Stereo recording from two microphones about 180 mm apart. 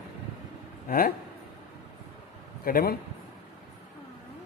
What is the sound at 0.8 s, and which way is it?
Speech, 55° left (ahead or behind).